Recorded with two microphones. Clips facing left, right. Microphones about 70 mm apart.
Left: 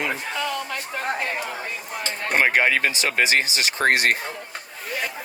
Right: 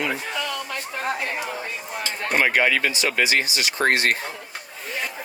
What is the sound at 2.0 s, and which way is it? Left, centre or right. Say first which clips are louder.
Speech: left 1 dB; left.